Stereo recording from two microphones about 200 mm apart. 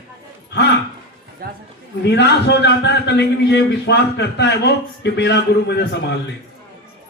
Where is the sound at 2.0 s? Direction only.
55° left (ahead or behind).